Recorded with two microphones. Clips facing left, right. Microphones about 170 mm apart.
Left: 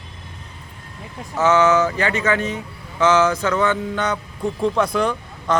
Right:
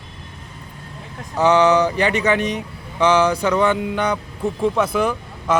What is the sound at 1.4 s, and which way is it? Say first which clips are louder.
Speech: right 1 dB; 15° right (ahead or behind).